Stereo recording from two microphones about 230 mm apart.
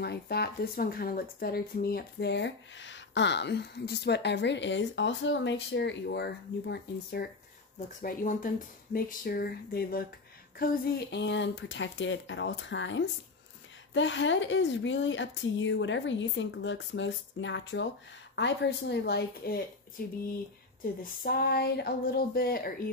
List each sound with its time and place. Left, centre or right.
0.0 s speech: left
21.0 s speech: left